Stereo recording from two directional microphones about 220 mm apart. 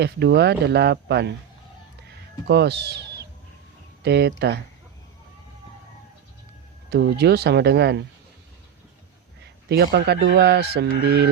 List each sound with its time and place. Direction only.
0.0 s speech: 50° right (ahead or behind)
2.5 s speech: 50° right (ahead or behind)
6.9 s speech: 50° right (ahead or behind)
9.4 s a sound: 50° right (ahead or behind)
10.2 s speech: 50° right (ahead or behind)